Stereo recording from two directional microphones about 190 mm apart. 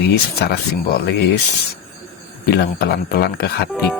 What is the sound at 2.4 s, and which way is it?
Speech, 55° left (ahead or behind).